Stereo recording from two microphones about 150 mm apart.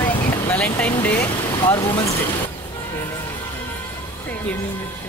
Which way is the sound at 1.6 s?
30° left (ahead or behind).